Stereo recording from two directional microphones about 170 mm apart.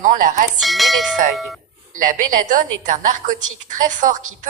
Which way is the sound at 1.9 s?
50° right (ahead or behind).